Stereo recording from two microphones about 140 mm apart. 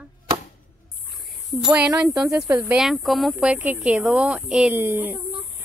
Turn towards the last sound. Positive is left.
turn(degrees=-10)  # may be behind; listen again after turning